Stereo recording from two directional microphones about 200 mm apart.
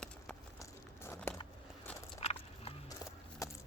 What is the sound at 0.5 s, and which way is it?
Crumpling, 15° left (ahead or behind).